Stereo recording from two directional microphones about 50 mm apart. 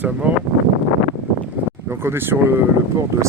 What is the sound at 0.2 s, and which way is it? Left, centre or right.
Speech, right.